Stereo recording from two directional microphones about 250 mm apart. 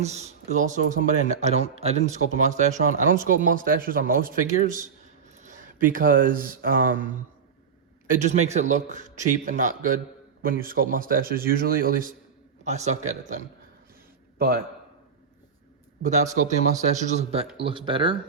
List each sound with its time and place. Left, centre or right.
0.0 s a man's voice: right
16.0 s speech: right